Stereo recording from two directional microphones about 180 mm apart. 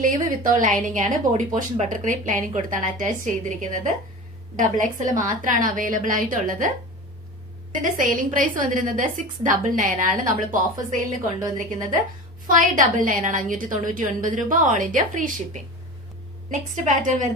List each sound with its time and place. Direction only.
0.0 s a woman's voice: 50° right (ahead or behind)
7.7 s a woman's voice: 50° right (ahead or behind)
12.5 s a woman's voice: 50° right (ahead or behind)
16.5 s a woman's voice: 45° right (ahead or behind)